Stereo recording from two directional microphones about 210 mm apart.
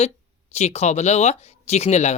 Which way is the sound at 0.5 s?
30° left (ahead or behind).